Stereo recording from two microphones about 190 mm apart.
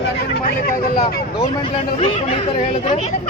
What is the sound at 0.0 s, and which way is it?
Vehicle, 50° left (ahead or behind).